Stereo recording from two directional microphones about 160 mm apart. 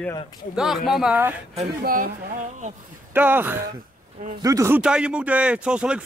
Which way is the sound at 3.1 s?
10° right (ahead or behind).